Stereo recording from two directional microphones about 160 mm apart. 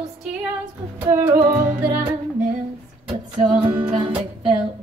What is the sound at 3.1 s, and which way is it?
Music, 35° right (ahead or behind).